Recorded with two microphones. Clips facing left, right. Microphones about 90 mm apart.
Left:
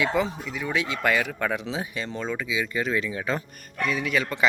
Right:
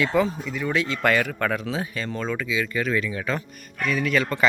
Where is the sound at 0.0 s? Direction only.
10° left (ahead or behind).